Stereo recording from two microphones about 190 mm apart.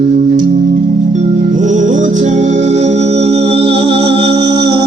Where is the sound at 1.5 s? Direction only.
40° right (ahead or behind); by 4.8 s 25° right (ahead or behind).